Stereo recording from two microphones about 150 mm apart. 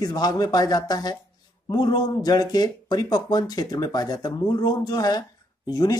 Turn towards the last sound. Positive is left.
turn(degrees=25)  # may be behind; listen again after turning